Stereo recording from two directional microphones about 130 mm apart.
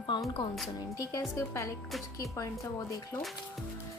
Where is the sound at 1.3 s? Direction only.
20° left (ahead or behind).